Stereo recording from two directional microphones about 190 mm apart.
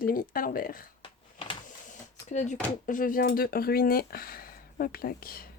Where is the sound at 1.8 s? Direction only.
40° left (ahead or behind).